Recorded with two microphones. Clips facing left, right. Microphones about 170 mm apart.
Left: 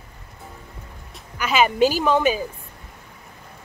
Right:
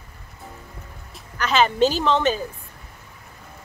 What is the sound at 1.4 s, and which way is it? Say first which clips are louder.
Speech: even; 10° left (ahead or behind).